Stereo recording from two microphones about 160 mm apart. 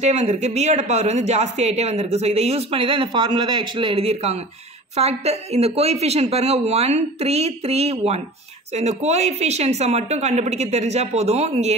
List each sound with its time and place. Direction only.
0.0 s a woman's voice: 45° right (ahead or behind)